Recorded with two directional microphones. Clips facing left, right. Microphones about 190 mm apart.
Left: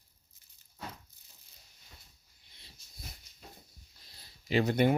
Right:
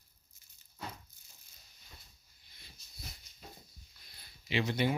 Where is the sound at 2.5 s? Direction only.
25° left (ahead or behind).